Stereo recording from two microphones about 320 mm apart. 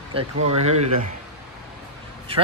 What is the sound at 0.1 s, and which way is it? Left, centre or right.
Speech, centre.